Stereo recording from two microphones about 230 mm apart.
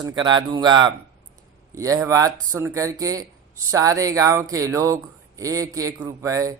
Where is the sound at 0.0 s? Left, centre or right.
Centre.